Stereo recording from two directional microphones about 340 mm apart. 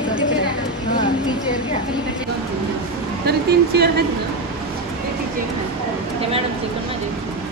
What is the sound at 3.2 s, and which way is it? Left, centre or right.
Speech, right.